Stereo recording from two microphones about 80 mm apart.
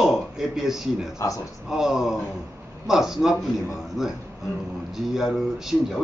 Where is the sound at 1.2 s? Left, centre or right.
Left.